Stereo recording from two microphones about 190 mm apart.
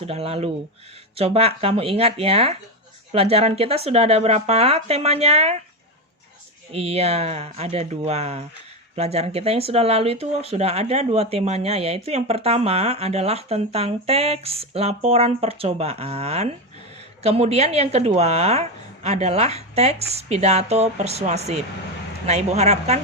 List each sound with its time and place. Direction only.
0.0 s speech: 30° right (ahead or behind)
6.7 s speech: 30° right (ahead or behind)